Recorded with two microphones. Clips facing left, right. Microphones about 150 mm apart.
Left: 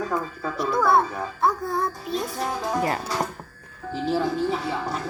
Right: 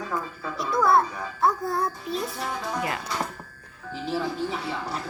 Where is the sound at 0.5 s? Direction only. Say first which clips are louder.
Left 1 dB; centre (ahead or behind).